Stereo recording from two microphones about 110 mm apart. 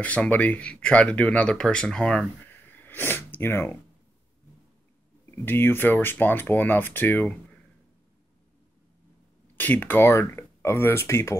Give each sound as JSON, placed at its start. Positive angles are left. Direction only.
{"t": 0.0, "sound": "speech", "side_deg": 15}
{"t": 5.4, "sound": "speech", "side_deg": 20}
{"t": 9.6, "sound": "speech", "side_deg": 15}